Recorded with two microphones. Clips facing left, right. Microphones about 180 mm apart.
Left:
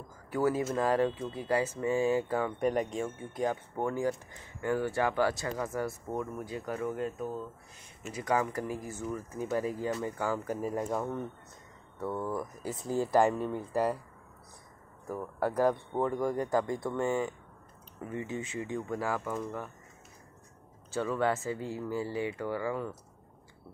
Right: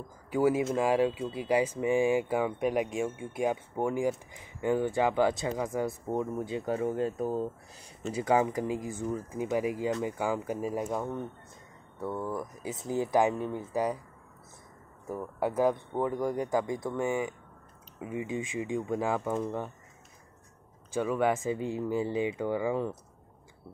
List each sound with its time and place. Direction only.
0.3 s speech: 15° right (ahead or behind); by 7.5 s 35° right (ahead or behind)
8.1 s speech: 25° right (ahead or behind); by 12.4 s centre (ahead or behind)
12.6 s speech: 20° right (ahead or behind)
13.5 s speech: centre (ahead or behind)
15.9 s speech: 10° right (ahead or behind); by 19.7 s 25° right (ahead or behind)
20.9 s speech: 15° right (ahead or behind)